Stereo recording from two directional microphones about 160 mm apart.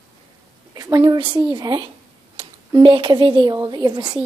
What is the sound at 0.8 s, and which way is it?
A woman's voice, 20° right (ahead or behind).